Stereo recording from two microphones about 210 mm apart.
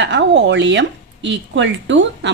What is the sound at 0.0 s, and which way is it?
A woman's voice, 60° right (ahead or behind).